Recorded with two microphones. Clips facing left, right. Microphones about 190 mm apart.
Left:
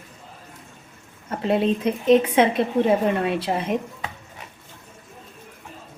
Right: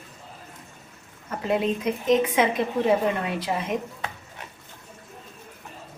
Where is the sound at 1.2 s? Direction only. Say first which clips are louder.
Left 3 dB; 30° left (ahead or behind).